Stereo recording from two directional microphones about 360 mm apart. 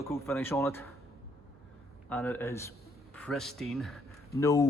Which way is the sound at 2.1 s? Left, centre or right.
Centre.